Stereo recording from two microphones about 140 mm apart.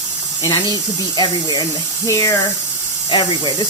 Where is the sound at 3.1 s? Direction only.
30° left (ahead or behind).